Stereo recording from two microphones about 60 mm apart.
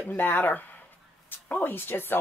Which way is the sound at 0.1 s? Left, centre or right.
Left.